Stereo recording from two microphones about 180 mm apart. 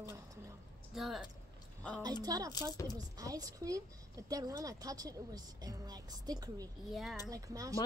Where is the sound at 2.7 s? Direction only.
20° left (ahead or behind).